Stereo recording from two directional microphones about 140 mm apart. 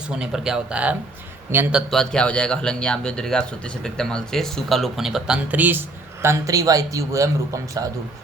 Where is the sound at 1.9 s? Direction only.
5° left (ahead or behind).